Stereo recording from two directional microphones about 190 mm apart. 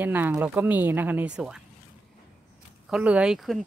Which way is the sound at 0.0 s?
10° right (ahead or behind).